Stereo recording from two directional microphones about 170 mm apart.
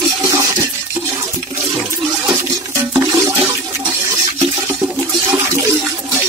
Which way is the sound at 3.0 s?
15° right (ahead or behind).